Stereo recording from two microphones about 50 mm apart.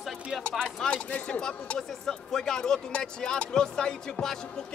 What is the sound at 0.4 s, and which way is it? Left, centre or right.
Speech, centre.